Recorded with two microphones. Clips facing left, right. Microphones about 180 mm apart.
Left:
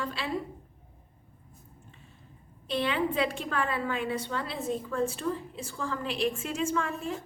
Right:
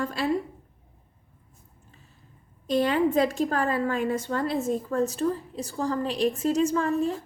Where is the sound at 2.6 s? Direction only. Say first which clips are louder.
Right 6 dB; 45° right (ahead or behind).